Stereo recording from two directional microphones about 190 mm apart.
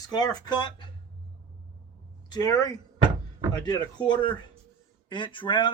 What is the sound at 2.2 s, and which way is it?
Speech, 20° left (ahead or behind).